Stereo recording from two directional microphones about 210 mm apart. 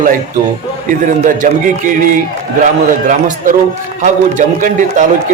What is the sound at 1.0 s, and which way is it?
A man's voice, 40° right (ahead or behind).